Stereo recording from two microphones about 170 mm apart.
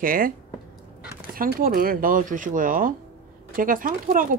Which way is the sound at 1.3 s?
60° right (ahead or behind).